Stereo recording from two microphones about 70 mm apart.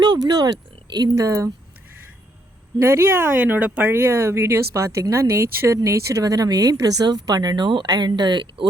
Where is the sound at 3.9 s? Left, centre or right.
Right.